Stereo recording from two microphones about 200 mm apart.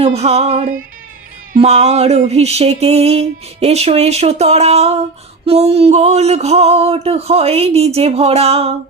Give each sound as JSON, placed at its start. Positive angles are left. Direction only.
{"t": 0.0, "sound": "music", "side_deg": -30}